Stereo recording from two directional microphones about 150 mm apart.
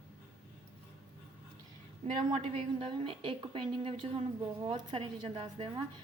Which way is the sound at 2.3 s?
35° right (ahead or behind).